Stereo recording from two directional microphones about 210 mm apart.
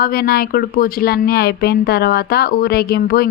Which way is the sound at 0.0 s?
45° left (ahead or behind).